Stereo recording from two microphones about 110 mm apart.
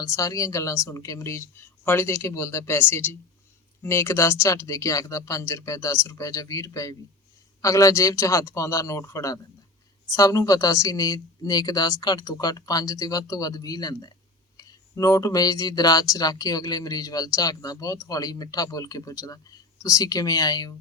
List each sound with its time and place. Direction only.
0.0 s a woman's voice: 30° left (ahead or behind)